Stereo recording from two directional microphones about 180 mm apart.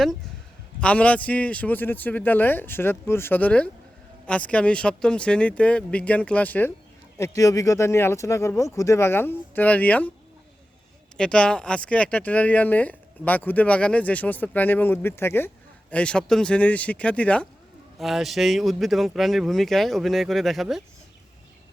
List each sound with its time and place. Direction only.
0.8 s speech: 5° left (ahead or behind)
11.2 s speech: 5° left (ahead or behind)